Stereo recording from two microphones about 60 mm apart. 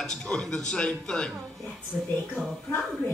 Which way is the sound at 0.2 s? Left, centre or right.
Centre.